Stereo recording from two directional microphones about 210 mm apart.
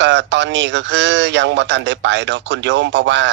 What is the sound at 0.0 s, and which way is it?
Speech, 55° right (ahead or behind).